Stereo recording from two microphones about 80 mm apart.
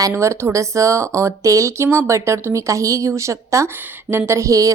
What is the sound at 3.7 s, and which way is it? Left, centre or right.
Speech, right.